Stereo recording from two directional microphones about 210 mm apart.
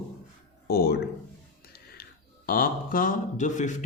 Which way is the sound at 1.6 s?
50° left (ahead or behind).